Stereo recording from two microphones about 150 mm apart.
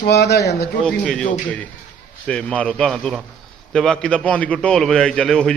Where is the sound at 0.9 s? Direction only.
5° left (ahead or behind).